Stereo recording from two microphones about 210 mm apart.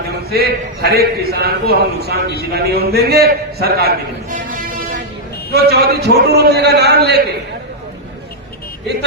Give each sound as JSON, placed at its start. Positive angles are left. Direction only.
{"t": 0.3, "sound": "a man's voice", "side_deg": -50}
{"t": 5.5, "sound": "a man's voice", "side_deg": -50}